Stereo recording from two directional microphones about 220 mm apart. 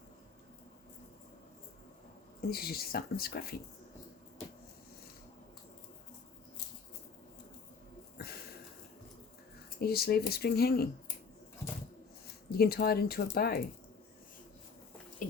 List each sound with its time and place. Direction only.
2.4 s speech: 45° left (ahead or behind)
8.2 s a sound: 45° left (ahead or behind)
9.8 s speech: 45° left (ahead or behind)
12.5 s speech: 45° left (ahead or behind)